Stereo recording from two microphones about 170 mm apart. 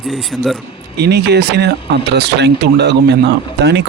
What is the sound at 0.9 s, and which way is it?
Speech, 75° right (ahead or behind).